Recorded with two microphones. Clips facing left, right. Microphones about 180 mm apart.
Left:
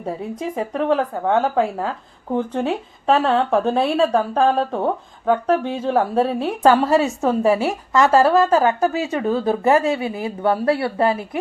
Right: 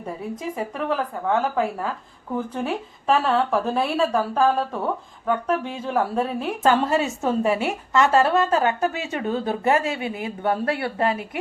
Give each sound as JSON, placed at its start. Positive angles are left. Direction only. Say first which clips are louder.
{"t": 0.3, "sound": "a woman's voice", "louder": "left 6 dB", "side_deg": 30}